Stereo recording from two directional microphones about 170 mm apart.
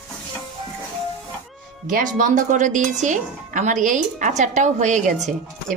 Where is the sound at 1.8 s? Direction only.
50° right (ahead or behind).